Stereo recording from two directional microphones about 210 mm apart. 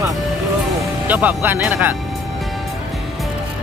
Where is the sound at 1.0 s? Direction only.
5° right (ahead or behind).